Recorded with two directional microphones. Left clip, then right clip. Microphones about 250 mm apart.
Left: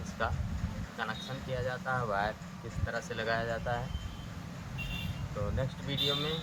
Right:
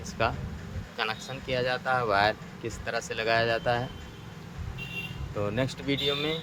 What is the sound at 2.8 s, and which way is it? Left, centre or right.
Speech, right.